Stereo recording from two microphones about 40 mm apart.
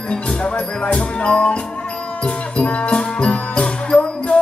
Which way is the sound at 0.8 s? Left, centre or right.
Left.